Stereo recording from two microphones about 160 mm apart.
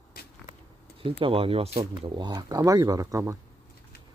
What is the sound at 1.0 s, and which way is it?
Speech, 35° right (ahead or behind).